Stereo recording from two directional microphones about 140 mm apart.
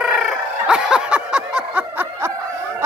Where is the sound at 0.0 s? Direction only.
5° right (ahead or behind).